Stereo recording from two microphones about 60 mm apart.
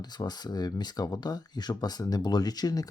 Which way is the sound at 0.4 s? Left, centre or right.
Left.